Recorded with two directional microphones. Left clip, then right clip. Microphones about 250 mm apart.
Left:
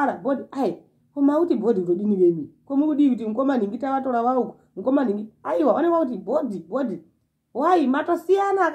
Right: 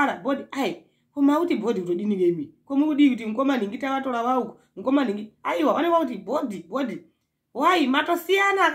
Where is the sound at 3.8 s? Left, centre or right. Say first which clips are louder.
Left 3 dB; right.